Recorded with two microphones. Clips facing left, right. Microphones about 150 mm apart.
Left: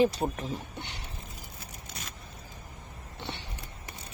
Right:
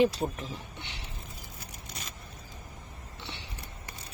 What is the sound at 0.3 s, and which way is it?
Speech, 45° left (ahead or behind).